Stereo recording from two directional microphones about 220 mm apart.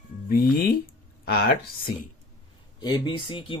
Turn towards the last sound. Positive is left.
turn(degrees=25)  # may be behind; listen again after turning